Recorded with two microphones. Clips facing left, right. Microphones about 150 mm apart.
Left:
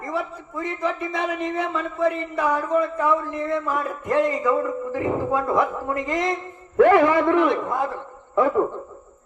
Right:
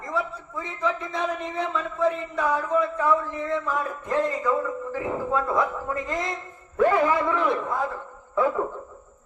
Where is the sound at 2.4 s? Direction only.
10° left (ahead or behind).